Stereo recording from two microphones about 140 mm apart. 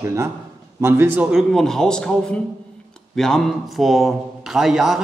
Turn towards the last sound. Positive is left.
turn(degrees=-5)  # may be behind; listen again after turning